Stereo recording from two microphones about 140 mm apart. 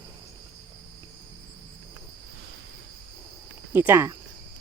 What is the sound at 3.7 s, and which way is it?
Speech, 15° right (ahead or behind).